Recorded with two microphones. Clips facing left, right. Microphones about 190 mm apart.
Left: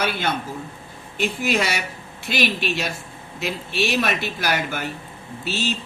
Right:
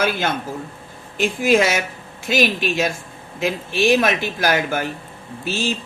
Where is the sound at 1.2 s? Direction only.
50° right (ahead or behind).